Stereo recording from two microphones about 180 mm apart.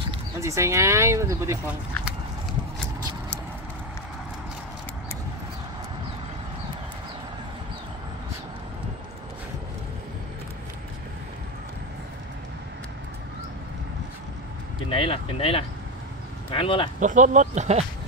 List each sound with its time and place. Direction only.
0.4 s speech: 15° right (ahead or behind)
14.9 s speech: 30° left (ahead or behind)
17.0 s speech: 45° right (ahead or behind)